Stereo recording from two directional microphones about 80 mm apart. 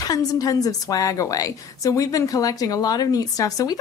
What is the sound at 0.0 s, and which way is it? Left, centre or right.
A woman's voice, left.